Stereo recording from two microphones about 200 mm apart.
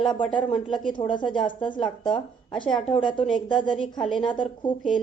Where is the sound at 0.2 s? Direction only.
5° left (ahead or behind).